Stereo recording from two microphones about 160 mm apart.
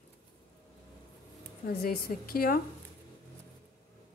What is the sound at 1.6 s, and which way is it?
Speech, 70° left (ahead or behind).